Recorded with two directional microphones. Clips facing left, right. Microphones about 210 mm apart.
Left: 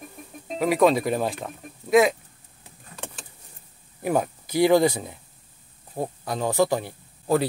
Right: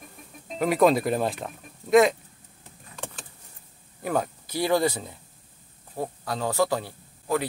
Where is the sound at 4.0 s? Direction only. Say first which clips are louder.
Left 3 dB; 10° left (ahead or behind).